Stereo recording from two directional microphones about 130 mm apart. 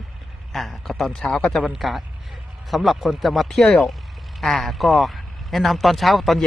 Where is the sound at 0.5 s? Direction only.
Centre (ahead or behind).